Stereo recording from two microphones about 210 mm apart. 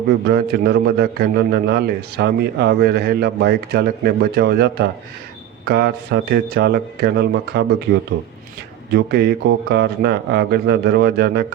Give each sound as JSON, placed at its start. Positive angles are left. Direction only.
{"t": 0.3, "sound": "a man's voice", "side_deg": -50}
{"t": 8.9, "sound": "a man's voice", "side_deg": -50}